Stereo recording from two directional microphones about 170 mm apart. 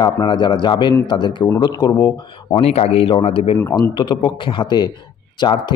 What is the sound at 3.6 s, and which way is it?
A man's voice, 20° left (ahead or behind).